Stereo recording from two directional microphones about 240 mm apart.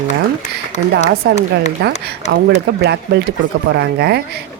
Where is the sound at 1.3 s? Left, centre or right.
Right.